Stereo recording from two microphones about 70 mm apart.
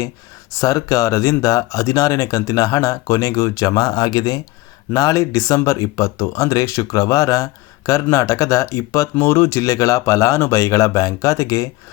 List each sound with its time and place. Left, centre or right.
0.6 s speech: left
4.9 s speech: left